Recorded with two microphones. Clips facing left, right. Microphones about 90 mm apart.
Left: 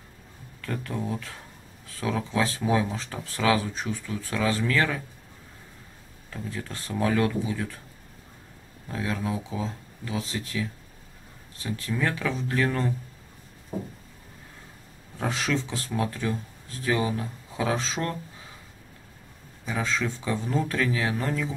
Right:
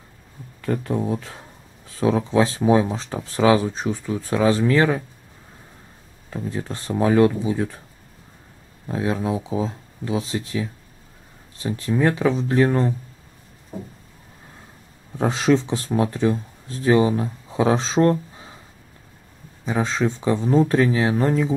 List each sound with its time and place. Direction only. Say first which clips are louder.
0.6 s speech: right 8 dB; 25° right (ahead or behind)
6.3 s speech: right 7 dB; 25° right (ahead or behind)
8.8 s speech: right 7 dB; 25° right (ahead or behind)
13.7 s a sound: left 1 dB; 5° left (ahead or behind)
15.1 s speech: right 9 dB; 30° right (ahead or behind)
19.6 s speech: right 6 dB; 30° right (ahead or behind)